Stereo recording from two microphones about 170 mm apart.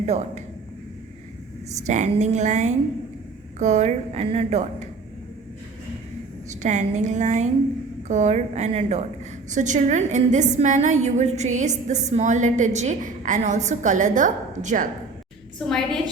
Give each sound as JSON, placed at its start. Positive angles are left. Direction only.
{"t": 0.0, "sound": "speech", "side_deg": -40}
{"t": 1.9, "sound": "a woman's voice", "side_deg": -45}
{"t": 6.5, "sound": "a woman's voice", "side_deg": -45}